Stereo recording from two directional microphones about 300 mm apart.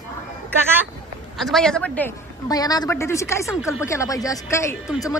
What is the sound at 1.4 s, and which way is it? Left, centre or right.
A woman's voice, centre.